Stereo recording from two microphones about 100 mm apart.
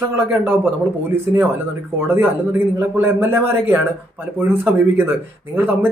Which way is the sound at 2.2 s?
20° right (ahead or behind).